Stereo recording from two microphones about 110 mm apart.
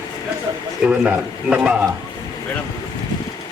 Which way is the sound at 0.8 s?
10° right (ahead or behind).